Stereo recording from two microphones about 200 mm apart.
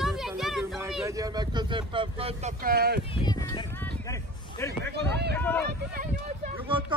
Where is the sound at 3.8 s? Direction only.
15° left (ahead or behind).